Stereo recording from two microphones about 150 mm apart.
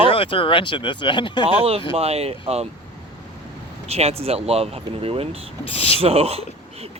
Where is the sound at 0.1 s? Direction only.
35° left (ahead or behind).